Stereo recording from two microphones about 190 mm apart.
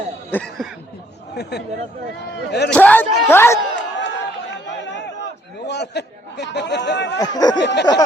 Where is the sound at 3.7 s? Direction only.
70° left (ahead or behind).